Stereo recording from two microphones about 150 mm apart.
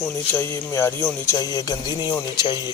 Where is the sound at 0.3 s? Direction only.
15° left (ahead or behind).